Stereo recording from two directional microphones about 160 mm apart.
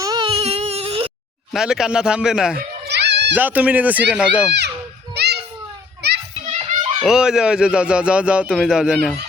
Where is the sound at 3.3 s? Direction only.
10° right (ahead or behind).